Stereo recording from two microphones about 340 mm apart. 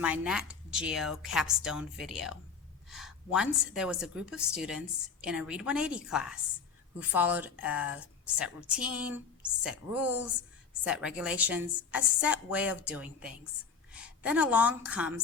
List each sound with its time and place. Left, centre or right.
0.0 s a woman's voice: centre